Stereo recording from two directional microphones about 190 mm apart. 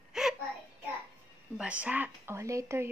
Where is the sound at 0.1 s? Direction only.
5° right (ahead or behind).